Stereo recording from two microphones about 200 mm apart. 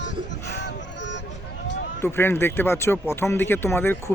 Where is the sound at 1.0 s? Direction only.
65° left (ahead or behind).